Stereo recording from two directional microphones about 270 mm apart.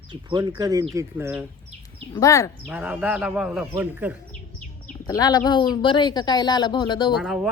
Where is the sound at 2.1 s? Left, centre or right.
Centre.